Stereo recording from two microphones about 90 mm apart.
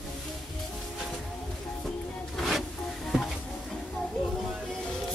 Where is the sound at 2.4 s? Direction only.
Centre (ahead or behind).